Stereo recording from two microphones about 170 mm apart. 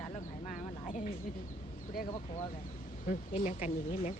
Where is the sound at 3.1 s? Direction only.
45° left (ahead or behind).